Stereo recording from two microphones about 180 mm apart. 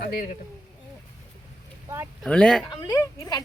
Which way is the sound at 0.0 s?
55° left (ahead or behind).